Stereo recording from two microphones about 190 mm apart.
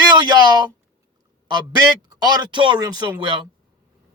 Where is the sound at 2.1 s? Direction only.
20° right (ahead or behind).